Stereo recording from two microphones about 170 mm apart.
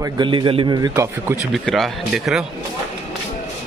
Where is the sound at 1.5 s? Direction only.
Centre (ahead or behind).